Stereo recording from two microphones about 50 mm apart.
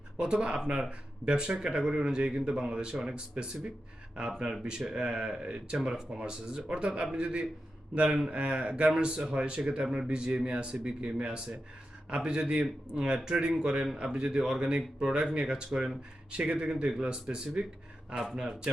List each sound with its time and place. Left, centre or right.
0.2 s speech: centre